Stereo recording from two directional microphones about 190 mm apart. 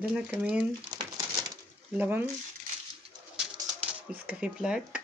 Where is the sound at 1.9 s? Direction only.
10° right (ahead or behind).